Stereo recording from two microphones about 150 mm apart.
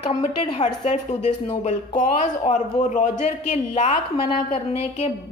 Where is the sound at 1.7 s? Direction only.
55° left (ahead or behind).